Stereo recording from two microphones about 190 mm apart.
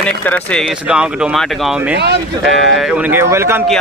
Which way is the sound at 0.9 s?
5° right (ahead or behind).